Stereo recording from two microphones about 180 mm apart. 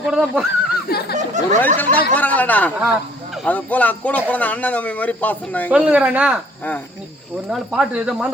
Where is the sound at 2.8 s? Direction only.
5° right (ahead or behind).